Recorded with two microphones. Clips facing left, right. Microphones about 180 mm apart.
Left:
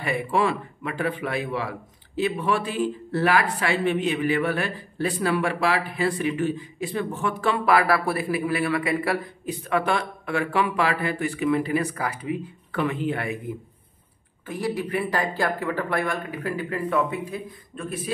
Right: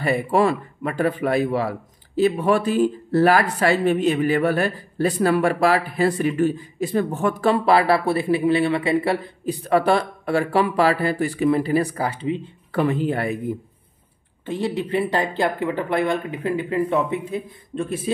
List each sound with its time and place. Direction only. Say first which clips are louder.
0.0 s speech: right 5 dB; 40° right (ahead or behind)
14.4 s speech: right 3 dB; 25° right (ahead or behind)